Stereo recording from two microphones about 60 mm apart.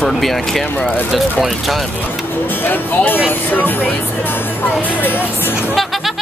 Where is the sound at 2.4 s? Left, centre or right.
Left.